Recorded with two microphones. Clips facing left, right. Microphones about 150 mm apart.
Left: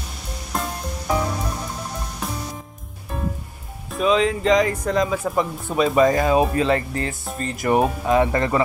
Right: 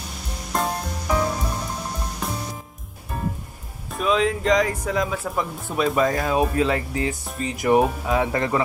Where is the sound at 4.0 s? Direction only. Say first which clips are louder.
Left 2 dB; centre (ahead or behind).